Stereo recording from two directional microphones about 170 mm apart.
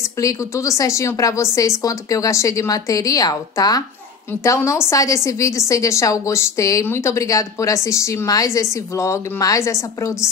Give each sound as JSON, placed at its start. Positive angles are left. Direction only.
{"t": 0.2, "sound": "a woman's voice", "side_deg": 20}